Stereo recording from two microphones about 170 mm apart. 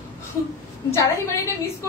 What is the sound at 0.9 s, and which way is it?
Speech, 15° left (ahead or behind).